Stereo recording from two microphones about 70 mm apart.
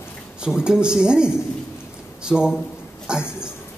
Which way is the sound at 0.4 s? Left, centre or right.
Centre.